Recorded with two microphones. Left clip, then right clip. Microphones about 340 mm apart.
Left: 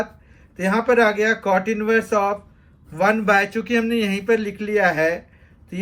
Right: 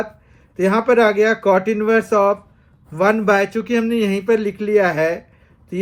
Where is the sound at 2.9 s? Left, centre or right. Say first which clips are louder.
Right 2 dB; centre.